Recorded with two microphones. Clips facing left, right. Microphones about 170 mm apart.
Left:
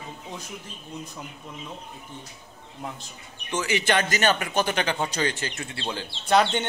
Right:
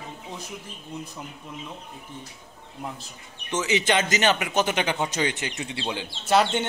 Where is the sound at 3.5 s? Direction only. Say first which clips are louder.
Right 1 dB; 20° right (ahead or behind).